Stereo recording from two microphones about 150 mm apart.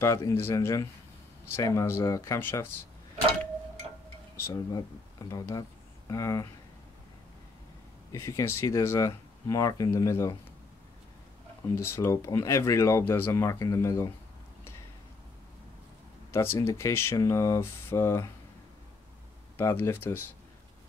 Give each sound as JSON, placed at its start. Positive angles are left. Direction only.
{"t": 0.0, "sound": "speech", "side_deg": 20}
{"t": 4.4, "sound": "speech", "side_deg": 20}
{"t": 8.1, "sound": "speech", "side_deg": 20}
{"t": 11.7, "sound": "speech", "side_deg": 15}
{"t": 16.3, "sound": "speech", "side_deg": 15}
{"t": 19.5, "sound": "speech", "side_deg": 15}